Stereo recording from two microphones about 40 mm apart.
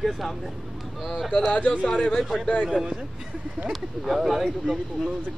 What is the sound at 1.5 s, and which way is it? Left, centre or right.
Speech, left.